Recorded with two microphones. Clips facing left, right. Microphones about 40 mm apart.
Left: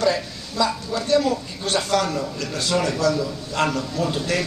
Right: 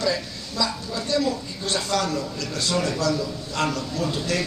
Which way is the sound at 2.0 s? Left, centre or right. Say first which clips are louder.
Left 2 dB; left.